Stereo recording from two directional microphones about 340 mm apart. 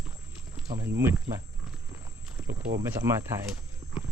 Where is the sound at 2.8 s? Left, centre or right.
Centre.